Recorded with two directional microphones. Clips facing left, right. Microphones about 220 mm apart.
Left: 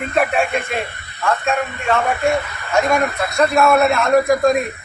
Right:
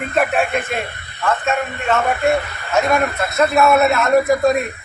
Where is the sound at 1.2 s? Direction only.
5° right (ahead or behind).